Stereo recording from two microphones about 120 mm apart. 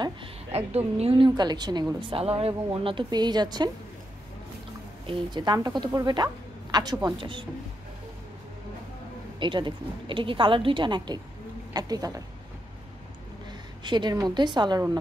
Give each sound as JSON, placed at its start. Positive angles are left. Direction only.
{"t": 0.7, "sound": "a woman's voice", "side_deg": -60}
{"t": 5.0, "sound": "a woman's voice", "side_deg": -40}
{"t": 9.4, "sound": "a woman's voice", "side_deg": -40}
{"t": 11.7, "sound": "a woman's voice", "side_deg": -30}
{"t": 13.5, "sound": "a woman's voice", "side_deg": -40}